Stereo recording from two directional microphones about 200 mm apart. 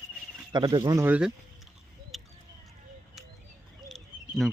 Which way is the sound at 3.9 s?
Centre (ahead or behind).